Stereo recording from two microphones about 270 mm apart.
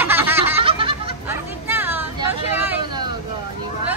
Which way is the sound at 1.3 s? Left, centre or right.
Centre.